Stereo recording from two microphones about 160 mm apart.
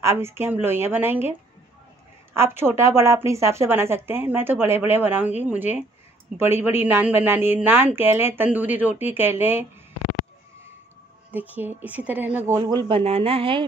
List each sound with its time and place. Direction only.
0.0 s a woman's voice: 15° right (ahead or behind)
2.3 s a woman's voice: 15° right (ahead or behind)
11.3 s a woman's voice: 10° right (ahead or behind); by 13.0 s 25° right (ahead or behind)
13.0 s a woman's voice: 35° right (ahead or behind)